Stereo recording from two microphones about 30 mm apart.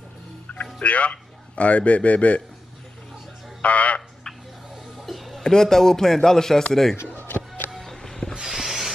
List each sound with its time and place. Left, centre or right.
0.7 s a man's voice: left
3.6 s speech: left
5.0 s a sound: centre
5.4 s a man's voice: left
7.2 s music: left
7.9 s music: centre
8.5 s a sound: centre